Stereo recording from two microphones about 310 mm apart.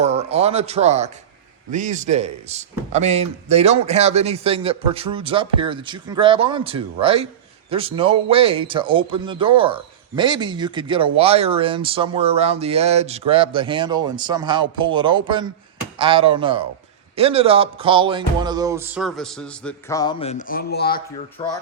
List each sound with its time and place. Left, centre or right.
0.0 s speech: centre; by 21.0 s left
21.4 s speech: centre